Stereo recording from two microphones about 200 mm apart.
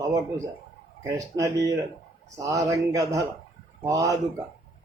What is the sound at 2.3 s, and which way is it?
Speech, 15° right (ahead or behind).